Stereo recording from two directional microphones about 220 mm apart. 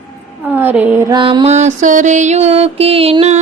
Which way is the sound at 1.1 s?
20° right (ahead or behind).